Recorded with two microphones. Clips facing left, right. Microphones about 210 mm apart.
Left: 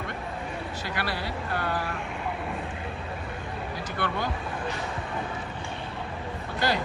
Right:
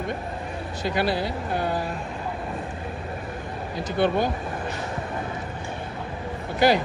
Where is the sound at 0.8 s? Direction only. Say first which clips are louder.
Right 10 dB; 15° right (ahead or behind).